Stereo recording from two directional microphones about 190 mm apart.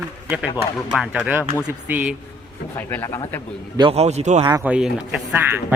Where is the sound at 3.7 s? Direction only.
30° right (ahead or behind).